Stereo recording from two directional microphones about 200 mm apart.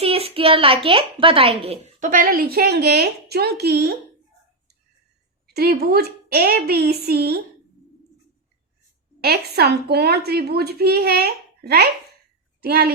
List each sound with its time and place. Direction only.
0.0 s a child's voice: 30° right (ahead or behind); by 3.9 s 50° right (ahead or behind)
5.5 s a woman's voice: 50° right (ahead or behind)
9.2 s a woman's voice: 50° right (ahead or behind)